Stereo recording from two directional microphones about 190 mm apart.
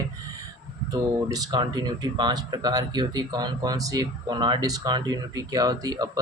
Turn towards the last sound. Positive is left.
turn(degrees=-20)  # may be behind; listen again after turning